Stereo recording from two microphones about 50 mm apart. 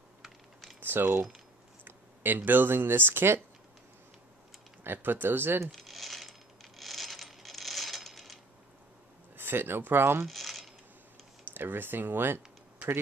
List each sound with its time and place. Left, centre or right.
0.2 s typing: centre
0.7 s a sound: right
1.9 s speech: right
4.8 s speech: right
5.7 s coin: centre
9.4 s speech: right
10.2 s a sound: centre
11.5 s speech: right